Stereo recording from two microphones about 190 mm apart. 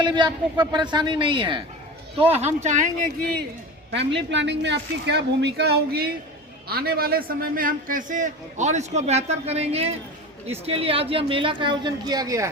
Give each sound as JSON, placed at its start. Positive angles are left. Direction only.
{"t": 0.0, "sound": "speech", "side_deg": -25}
{"t": 3.9, "sound": "a man's voice", "side_deg": -65}